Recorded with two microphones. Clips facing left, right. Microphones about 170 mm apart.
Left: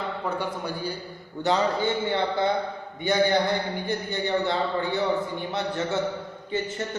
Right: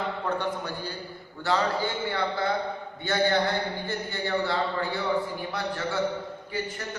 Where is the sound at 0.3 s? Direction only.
10° left (ahead or behind).